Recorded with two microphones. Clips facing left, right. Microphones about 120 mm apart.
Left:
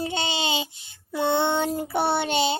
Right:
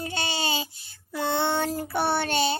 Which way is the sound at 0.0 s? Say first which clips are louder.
Left 3 dB; 20° left (ahead or behind).